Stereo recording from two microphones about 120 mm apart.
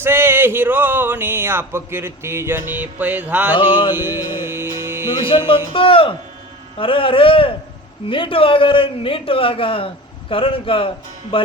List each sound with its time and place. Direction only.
0.0 s speech: 20° right (ahead or behind)
3.5 s a man's voice: 45° left (ahead or behind)
3.9 s music: 20° right (ahead or behind)
5.5 s a man's voice: 50° left (ahead or behind)